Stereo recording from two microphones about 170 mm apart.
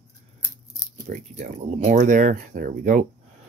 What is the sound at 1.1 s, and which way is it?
Speech, 55° right (ahead or behind).